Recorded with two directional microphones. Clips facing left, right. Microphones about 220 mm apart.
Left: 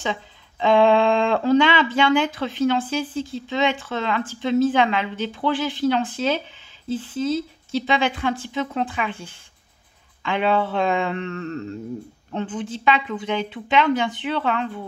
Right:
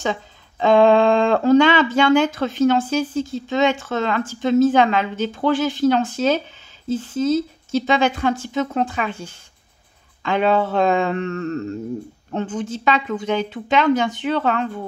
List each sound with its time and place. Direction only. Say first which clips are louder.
0.0 s speech: right 3 dB; 45° right (ahead or behind)